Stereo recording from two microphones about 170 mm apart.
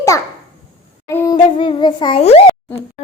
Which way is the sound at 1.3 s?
30° left (ahead or behind).